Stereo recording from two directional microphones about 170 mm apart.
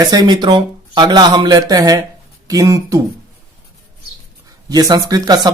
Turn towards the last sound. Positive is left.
turn(degrees=-20)  # may be behind; listen again after turning